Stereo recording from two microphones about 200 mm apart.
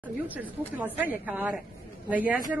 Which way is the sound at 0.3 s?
10° right (ahead or behind).